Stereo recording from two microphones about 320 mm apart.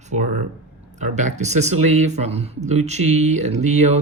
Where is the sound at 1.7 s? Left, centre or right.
Right.